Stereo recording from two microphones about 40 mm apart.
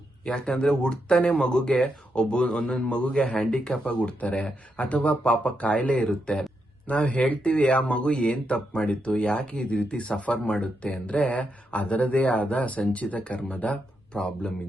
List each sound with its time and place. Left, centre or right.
0.3 s speech: centre
3.8 s speech: left
7.1 s speech: left